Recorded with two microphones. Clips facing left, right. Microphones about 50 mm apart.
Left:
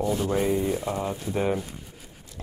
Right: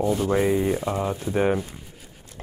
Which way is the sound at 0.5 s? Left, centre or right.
Right.